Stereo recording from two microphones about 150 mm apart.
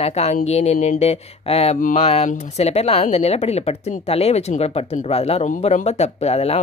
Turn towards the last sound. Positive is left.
turn(degrees=45)  # may be behind; listen again after turning